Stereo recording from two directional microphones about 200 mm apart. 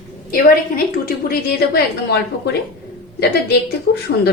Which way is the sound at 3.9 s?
60° left (ahead or behind).